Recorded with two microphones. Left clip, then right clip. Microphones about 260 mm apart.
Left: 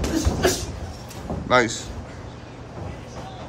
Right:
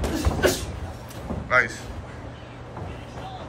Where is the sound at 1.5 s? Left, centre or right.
Centre.